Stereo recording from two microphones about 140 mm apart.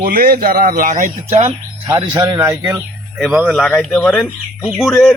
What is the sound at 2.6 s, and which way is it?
Speech, 5° right (ahead or behind).